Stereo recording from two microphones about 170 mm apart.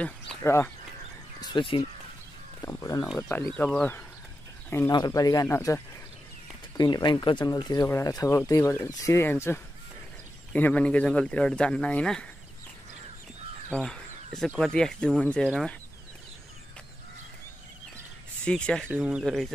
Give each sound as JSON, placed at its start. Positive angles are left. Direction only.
{"t": 0.3, "sound": "speech", "side_deg": 15}
{"t": 1.4, "sound": "speech", "side_deg": 30}
{"t": 2.6, "sound": "speech", "side_deg": 20}
{"t": 6.8, "sound": "speech", "side_deg": 25}
{"t": 13.7, "sound": "a sound", "side_deg": 5}
{"t": 14.6, "sound": "speech", "side_deg": 5}
{"t": 18.4, "sound": "speech", "side_deg": 5}